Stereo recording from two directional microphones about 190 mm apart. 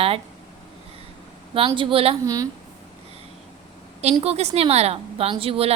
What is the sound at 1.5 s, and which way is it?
Speech, 25° right (ahead or behind).